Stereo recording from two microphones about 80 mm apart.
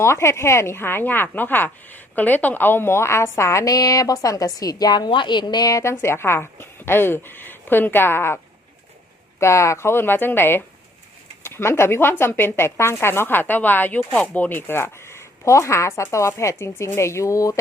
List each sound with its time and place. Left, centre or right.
0.0 s a woman's voice: left
5.8 s speech: left
9.4 s a woman's voice: left